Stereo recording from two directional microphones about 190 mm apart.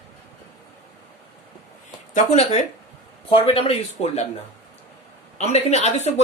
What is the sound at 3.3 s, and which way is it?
Speech, 30° left (ahead or behind).